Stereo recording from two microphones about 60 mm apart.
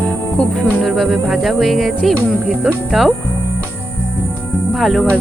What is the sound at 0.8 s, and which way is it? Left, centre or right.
Speech, centre.